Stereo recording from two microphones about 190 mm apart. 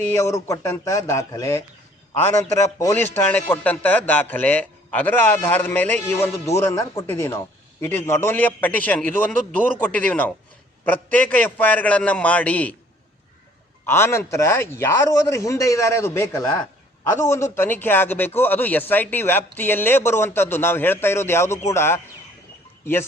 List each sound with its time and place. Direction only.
0.2 s a man's voice: 15° left (ahead or behind)
13.8 s a man's voice: 15° left (ahead or behind)